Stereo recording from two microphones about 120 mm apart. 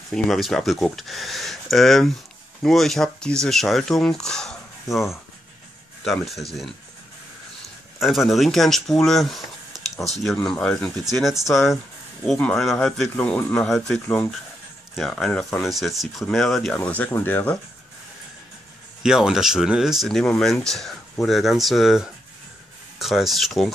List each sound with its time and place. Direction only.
0.1 s speech: centre (ahead or behind)
8.0 s speech: centre (ahead or behind)
14.0 s speech: 20° left (ahead or behind)
15.0 s speech: 5° left (ahead or behind)
19.0 s speech: 5° right (ahead or behind)